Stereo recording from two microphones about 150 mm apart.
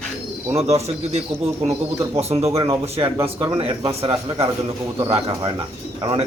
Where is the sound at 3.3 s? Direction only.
30° right (ahead or behind).